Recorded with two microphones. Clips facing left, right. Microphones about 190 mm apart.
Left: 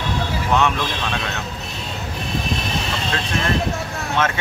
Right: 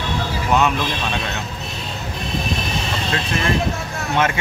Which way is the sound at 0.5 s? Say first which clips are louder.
Right 1 dB; 5° right (ahead or behind).